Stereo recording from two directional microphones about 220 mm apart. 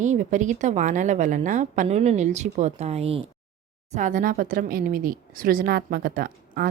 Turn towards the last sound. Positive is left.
turn(degrees=-40)  # may be behind; listen again after turning